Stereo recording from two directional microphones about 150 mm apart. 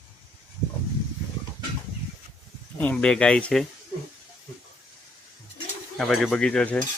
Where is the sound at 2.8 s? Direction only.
10° left (ahead or behind).